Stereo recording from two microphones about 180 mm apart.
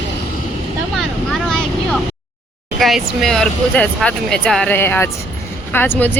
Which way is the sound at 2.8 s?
Centre (ahead or behind).